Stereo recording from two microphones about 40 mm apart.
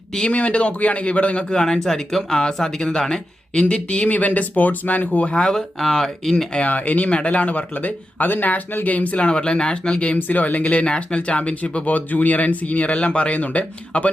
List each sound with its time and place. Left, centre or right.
0.3 s speech: left
1.5 s speech: centre; by 5.3 s left
5.3 s speech: left
5.5 s speech: centre
6.7 s speech: left
9.2 s speech: left
10.2 s speech: left
11.9 s speech: left